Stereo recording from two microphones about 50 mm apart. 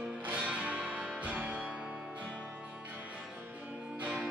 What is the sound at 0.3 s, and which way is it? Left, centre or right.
Music, right.